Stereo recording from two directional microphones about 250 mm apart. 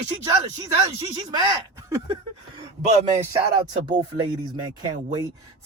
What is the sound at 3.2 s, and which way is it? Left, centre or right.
Speech, centre.